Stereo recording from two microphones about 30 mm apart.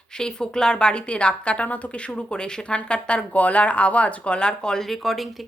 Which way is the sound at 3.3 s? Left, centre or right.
Left.